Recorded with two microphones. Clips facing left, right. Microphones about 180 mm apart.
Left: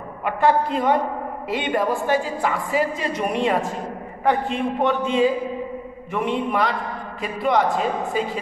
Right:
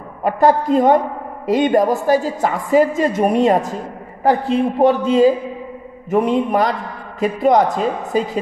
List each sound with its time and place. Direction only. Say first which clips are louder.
0.2 s a woman's voice: right 5 dB; 40° right (ahead or behind)